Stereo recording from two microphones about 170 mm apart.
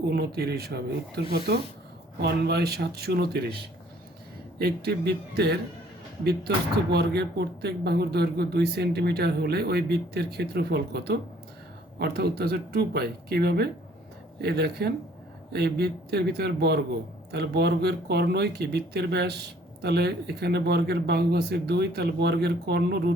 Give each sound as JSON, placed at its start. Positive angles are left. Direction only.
{"t": 0.0, "sound": "speech", "side_deg": -75}
{"t": 2.2, "sound": "speech", "side_deg": -70}
{"t": 4.5, "sound": "speech", "side_deg": -70}
{"t": 6.9, "sound": "speech", "side_deg": -75}